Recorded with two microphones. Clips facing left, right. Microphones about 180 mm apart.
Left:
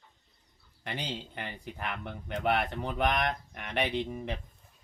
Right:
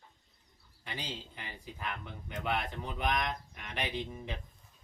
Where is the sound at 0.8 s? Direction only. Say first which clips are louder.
Left 5 dB; 65° left (ahead or behind).